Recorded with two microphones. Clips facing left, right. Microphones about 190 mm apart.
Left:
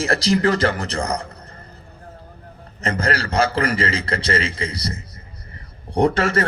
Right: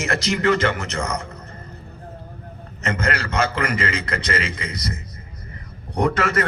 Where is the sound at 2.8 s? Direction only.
35° left (ahead or behind).